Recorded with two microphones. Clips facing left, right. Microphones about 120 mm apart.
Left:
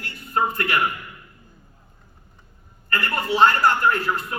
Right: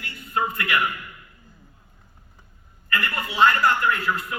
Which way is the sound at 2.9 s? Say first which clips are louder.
Left 4 dB; 35° left (ahead or behind).